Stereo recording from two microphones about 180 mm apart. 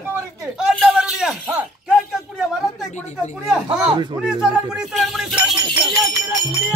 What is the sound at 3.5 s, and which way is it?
Speech, centre (ahead or behind).